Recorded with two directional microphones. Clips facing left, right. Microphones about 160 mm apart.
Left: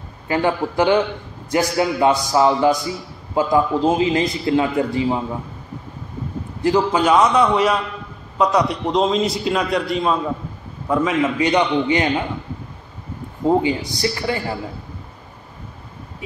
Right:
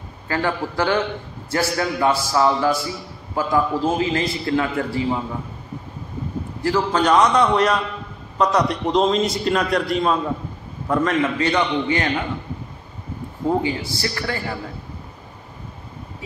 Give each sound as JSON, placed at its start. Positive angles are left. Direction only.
{"t": 0.3, "sound": "a man's voice", "side_deg": 15}
{"t": 6.6, "sound": "a man's voice", "side_deg": 15}
{"t": 13.5, "sound": "a man's voice", "side_deg": 20}